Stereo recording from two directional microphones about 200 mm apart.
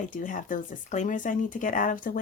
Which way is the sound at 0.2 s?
40° left (ahead or behind).